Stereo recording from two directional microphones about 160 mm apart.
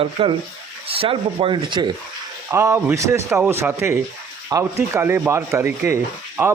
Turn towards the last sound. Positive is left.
turn(degrees=-15)  # may be behind; listen again after turning